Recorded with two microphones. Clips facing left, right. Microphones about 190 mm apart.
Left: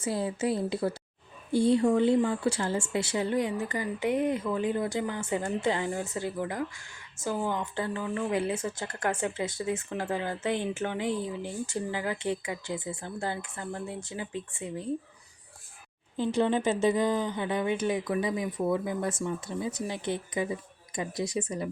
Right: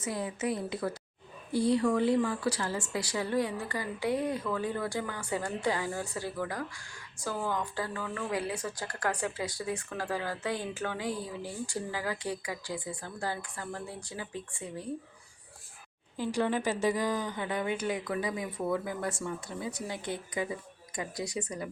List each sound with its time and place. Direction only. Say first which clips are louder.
0.0 s speech: left 4 dB; 30° left (ahead or behind)
16.1 s speech: left 4 dB; 25° left (ahead or behind)